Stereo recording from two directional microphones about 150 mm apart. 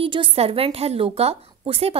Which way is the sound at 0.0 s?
35° right (ahead or behind).